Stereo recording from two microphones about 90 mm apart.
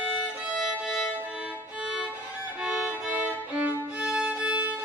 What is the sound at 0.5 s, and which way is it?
Violin, 5° right (ahead or behind).